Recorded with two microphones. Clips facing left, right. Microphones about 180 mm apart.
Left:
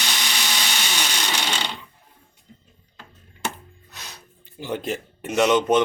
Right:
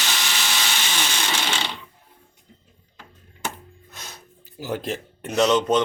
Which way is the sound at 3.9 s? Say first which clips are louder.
Right 1 dB; 50° right (ahead or behind).